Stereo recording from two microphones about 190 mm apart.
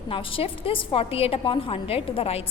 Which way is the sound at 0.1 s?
30° left (ahead or behind).